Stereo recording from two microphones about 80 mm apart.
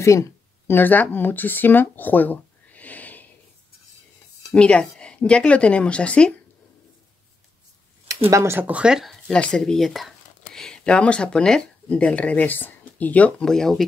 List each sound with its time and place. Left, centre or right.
0.7 s speech: left
4.5 s a woman's voice: centre
8.1 s speech: right
8.5 s speech: centre
9.0 s speech: centre
13.5 s speech: centre